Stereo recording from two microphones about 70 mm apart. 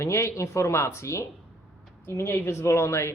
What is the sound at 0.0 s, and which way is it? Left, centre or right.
Speech, left.